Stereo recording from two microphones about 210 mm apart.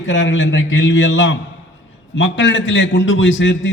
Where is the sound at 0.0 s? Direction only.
60° left (ahead or behind).